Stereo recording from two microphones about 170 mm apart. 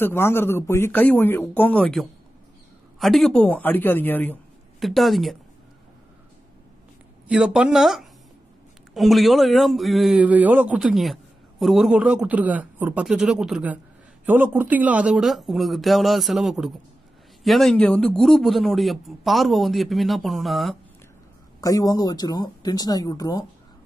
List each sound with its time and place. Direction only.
0.0 s speech: 15° left (ahead or behind)
4.7 s a man's voice: centre (ahead or behind)
7.2 s a man's voice: 5° right (ahead or behind)
21.5 s speech: 20° left (ahead or behind)